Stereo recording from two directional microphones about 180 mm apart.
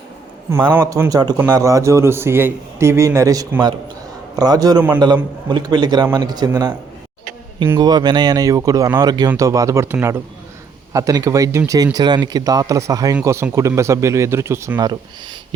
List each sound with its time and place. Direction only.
0.7 s a man's voice: 15° right (ahead or behind)
7.8 s a man's voice: 25° right (ahead or behind)